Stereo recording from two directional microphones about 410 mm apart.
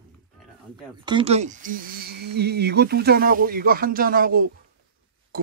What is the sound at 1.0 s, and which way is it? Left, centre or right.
Speech, centre.